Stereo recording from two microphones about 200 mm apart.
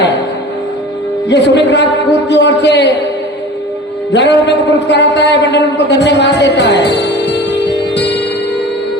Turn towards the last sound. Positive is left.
turn(degrees=60)  # may be behind; listen again after turning